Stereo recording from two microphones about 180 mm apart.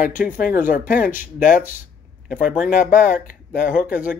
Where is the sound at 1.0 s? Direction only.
10° right (ahead or behind).